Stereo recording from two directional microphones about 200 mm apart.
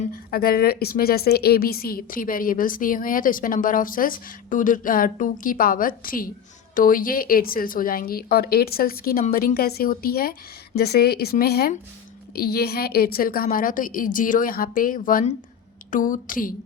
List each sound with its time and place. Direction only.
0.1 s a woman's voice: 50° left (ahead or behind)